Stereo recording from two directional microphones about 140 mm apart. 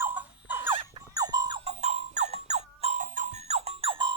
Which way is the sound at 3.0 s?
70° right (ahead or behind).